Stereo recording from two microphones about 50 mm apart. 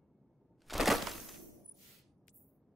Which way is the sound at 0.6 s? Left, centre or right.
Centre.